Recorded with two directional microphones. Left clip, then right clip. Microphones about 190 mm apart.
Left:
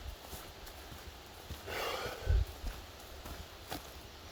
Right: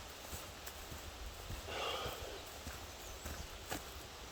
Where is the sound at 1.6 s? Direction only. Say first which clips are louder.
Left 3 dB; 45° left (ahead or behind).